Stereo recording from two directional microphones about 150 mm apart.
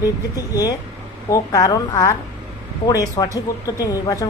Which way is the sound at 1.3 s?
25° left (ahead or behind).